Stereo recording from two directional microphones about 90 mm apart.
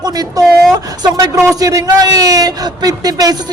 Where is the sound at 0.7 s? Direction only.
45° right (ahead or behind).